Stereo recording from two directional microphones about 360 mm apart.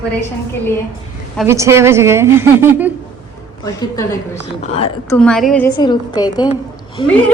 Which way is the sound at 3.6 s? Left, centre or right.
Centre.